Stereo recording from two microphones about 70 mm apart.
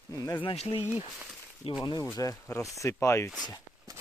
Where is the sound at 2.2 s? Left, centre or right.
Left.